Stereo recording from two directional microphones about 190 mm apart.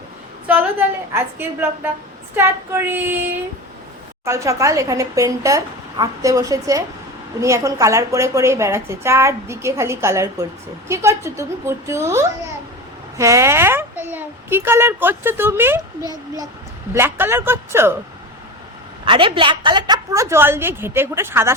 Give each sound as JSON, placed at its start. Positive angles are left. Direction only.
{"t": 0.4, "sound": "a woman's voice", "side_deg": -10}
{"t": 4.3, "sound": "a woman's voice", "side_deg": -15}
{"t": 16.9, "sound": "a woman's voice", "side_deg": -10}
{"t": 19.0, "sound": "a woman's voice", "side_deg": -25}